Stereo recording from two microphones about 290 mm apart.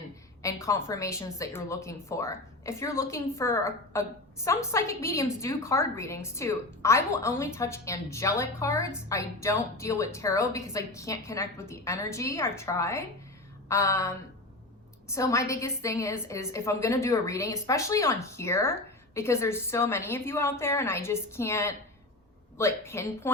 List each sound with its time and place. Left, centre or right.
0.4 s a woman's voice: centre